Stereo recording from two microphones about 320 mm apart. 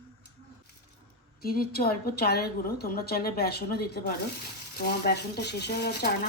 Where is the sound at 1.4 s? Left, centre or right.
Left.